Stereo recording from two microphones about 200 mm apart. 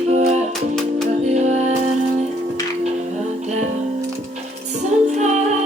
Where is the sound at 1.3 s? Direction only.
35° right (ahead or behind).